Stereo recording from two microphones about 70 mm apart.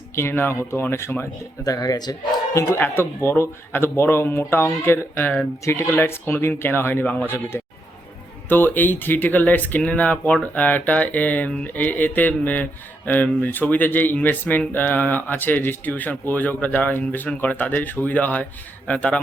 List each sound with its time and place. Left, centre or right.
0.2 s a man's voice: left
1.6 s speech: left
2.7 s a man's voice: left